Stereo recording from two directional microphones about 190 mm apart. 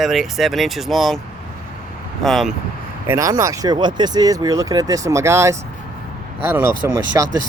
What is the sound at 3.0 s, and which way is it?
Speech, 20° right (ahead or behind).